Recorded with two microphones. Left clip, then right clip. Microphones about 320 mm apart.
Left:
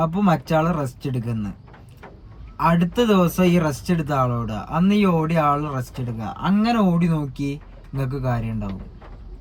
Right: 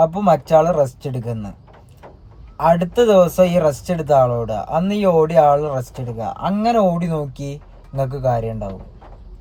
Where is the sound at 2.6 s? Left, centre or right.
Centre.